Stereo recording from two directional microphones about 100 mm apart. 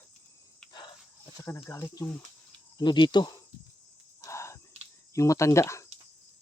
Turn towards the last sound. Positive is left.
turn(degrees=30)  # may be behind; listen again after turning